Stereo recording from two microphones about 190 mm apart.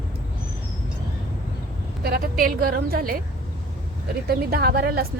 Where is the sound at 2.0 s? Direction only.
50° right (ahead or behind).